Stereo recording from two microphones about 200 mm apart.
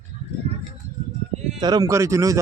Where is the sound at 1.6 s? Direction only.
20° right (ahead or behind).